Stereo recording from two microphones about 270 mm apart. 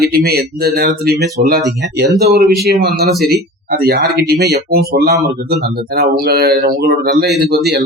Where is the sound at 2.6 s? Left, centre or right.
Right.